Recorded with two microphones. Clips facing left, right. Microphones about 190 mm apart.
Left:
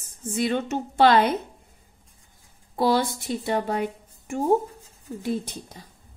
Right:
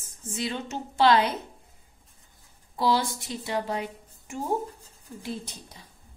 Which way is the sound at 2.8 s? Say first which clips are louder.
Left 3 dB; 55° left (ahead or behind).